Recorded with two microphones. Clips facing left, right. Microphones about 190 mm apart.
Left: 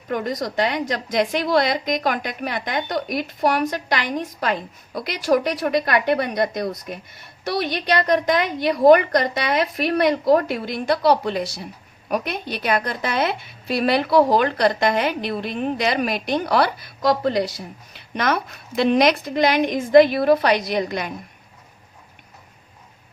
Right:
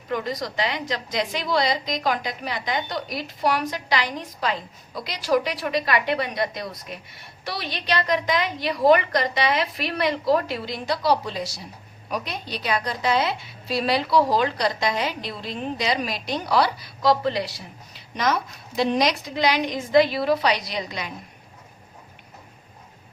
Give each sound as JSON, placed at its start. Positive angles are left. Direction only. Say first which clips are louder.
{"t": 0.1, "sound": "a woman's voice", "louder": "left 3 dB", "side_deg": 50}
{"t": 17.9, "sound": "a woman's voice", "louder": "left 2 dB", "side_deg": 60}